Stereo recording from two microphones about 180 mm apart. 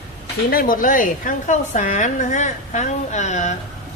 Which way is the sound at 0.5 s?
50° left (ahead or behind).